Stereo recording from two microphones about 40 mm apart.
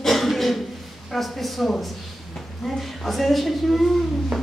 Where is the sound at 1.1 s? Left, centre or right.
Centre.